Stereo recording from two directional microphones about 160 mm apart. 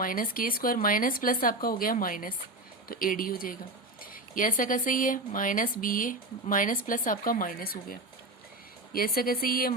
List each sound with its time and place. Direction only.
0.0 s speech: 60° left (ahead or behind)